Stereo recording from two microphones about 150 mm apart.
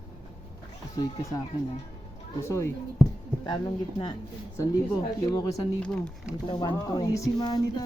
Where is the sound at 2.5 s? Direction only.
20° left (ahead or behind).